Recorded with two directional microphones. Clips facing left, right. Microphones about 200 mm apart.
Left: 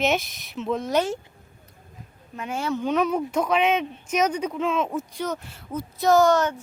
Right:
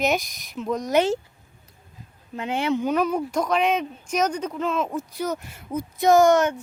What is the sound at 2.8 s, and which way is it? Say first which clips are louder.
Speech: even; centre (ahead or behind).